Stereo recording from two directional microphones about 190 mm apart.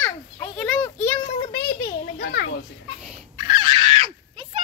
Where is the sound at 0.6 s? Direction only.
5° left (ahead or behind).